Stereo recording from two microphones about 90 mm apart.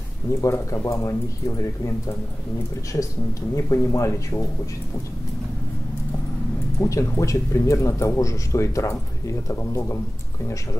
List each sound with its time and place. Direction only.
0.3 s a man's voice: 35° left (ahead or behind)
3.5 s a man's voice: 35° left (ahead or behind)
6.8 s a man's voice: 35° left (ahead or behind)